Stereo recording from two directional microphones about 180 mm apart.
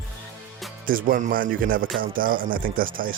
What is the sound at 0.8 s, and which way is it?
Speech, 50° right (ahead or behind).